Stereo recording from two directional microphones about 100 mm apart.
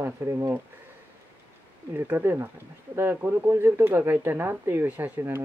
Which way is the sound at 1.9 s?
20° right (ahead or behind).